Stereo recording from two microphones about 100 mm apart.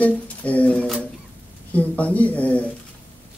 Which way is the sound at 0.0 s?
15° left (ahead or behind).